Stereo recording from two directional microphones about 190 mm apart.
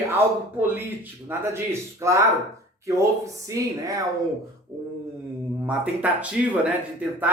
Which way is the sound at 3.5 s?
15° right (ahead or behind).